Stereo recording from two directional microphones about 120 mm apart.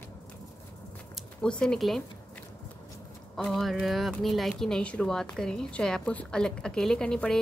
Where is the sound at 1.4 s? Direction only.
5° left (ahead or behind).